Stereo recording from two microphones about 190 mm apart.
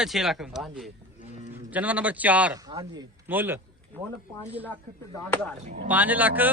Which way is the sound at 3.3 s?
10° right (ahead or behind).